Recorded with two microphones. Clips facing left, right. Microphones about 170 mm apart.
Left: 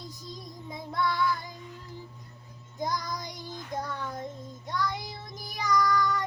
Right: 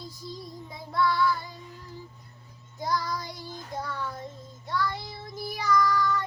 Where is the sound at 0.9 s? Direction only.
20° left (ahead or behind).